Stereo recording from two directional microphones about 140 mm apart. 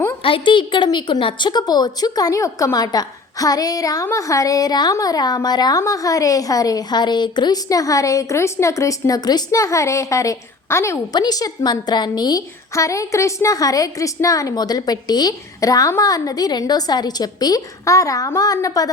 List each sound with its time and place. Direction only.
0.2 s a woman's voice: 40° left (ahead or behind)